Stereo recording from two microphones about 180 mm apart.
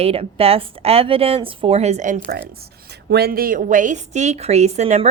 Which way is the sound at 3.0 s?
60° right (ahead or behind).